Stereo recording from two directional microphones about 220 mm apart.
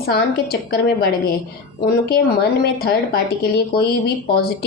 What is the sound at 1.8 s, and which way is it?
Speech, 45° left (ahead or behind).